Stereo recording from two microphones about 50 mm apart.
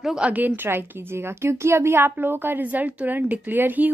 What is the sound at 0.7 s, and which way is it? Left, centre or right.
Speech, right.